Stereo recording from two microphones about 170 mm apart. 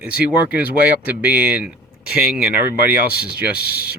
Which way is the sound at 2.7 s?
65° left (ahead or behind).